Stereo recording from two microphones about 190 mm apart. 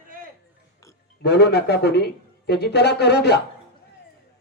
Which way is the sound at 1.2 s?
60° left (ahead or behind).